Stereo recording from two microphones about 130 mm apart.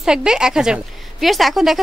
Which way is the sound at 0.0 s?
5° right (ahead or behind).